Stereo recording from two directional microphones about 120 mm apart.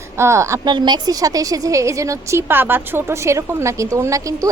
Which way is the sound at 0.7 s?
35° right (ahead or behind).